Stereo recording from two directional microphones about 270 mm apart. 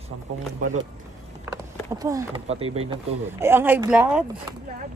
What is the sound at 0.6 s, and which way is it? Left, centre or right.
Speech, right.